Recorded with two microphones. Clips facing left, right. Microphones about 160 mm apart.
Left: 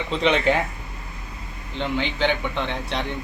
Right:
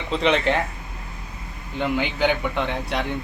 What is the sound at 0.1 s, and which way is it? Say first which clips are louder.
Speech: even; centre (ahead or behind).